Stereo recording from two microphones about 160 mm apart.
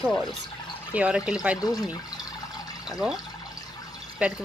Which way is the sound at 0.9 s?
5° right (ahead or behind).